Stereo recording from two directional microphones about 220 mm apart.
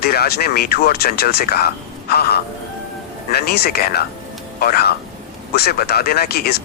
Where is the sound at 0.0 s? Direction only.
45° left (ahead or behind).